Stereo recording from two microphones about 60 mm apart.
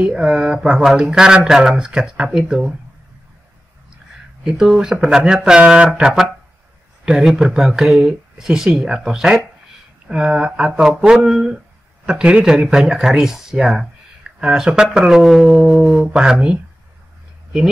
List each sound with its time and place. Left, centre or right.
0.0 s speech: centre
4.5 s speech: centre
7.1 s speech: centre
16.1 s speech: centre